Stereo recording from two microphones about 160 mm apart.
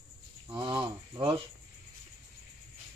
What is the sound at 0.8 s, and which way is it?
Rub, 35° right (ahead or behind).